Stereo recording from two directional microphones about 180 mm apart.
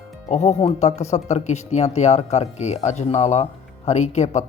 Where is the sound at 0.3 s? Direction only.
40° left (ahead or behind).